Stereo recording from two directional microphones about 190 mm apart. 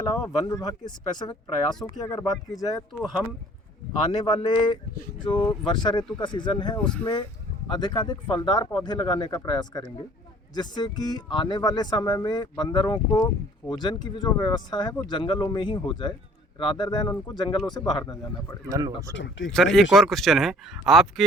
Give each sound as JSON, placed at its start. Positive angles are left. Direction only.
{"t": 0.0, "sound": "speech", "side_deg": 20}
{"t": 3.0, "sound": "speech", "side_deg": 0}
{"t": 4.3, "sound": "speech", "side_deg": 25}
{"t": 6.7, "sound": "speech", "side_deg": 5}
{"t": 7.7, "sound": "speech", "side_deg": 20}
{"t": 18.7, "sound": "speech", "side_deg": -20}
{"t": 19.1, "sound": "speech", "side_deg": 75}
{"t": 19.9, "sound": "speech", "side_deg": 0}